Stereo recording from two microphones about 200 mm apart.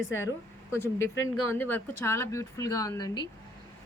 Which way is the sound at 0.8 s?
10° left (ahead or behind).